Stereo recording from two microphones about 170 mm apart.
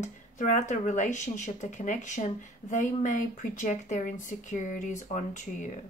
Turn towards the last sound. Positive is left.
turn(degrees=50)  # may be behind; listen again after turning